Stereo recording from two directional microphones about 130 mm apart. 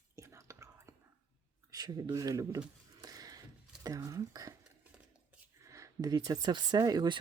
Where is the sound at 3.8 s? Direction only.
25° right (ahead or behind).